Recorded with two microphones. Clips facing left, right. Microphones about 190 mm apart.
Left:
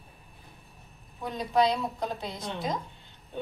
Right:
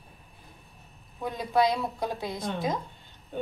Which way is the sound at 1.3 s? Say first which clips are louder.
Even; 10° right (ahead or behind).